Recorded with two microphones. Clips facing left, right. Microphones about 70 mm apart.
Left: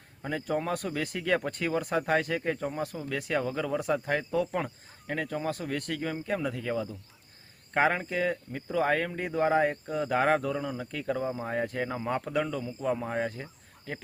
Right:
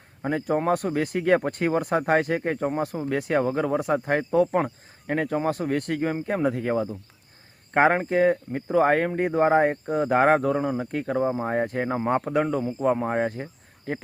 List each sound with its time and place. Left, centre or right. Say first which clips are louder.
0.2 s speech: right 6 dB; right